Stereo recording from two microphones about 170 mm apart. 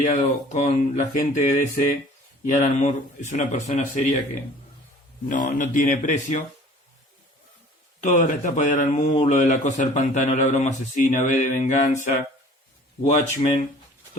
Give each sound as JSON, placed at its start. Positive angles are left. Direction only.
{"t": 0.0, "sound": "a man's voice", "side_deg": 45}
{"t": 5.3, "sound": "a man's voice", "side_deg": 50}
{"t": 8.0, "sound": "a man's voice", "side_deg": 50}
{"t": 13.1, "sound": "a man's voice", "side_deg": 45}